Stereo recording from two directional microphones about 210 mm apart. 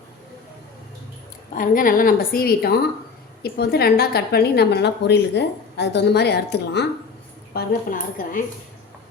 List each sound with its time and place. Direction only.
1.5 s a woman's voice: 40° left (ahead or behind)